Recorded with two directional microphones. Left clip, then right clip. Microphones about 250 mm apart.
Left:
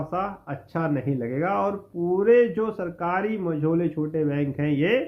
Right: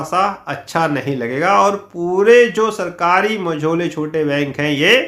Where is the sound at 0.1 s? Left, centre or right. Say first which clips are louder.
Right 15 dB; centre.